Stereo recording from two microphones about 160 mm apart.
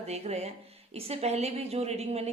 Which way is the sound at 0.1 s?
40° right (ahead or behind).